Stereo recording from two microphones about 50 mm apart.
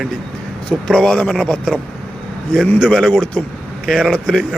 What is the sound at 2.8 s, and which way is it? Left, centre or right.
Speech, centre.